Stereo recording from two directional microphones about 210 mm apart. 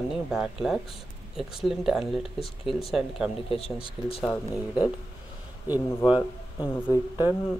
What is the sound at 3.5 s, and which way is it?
Speech, 25° left (ahead or behind).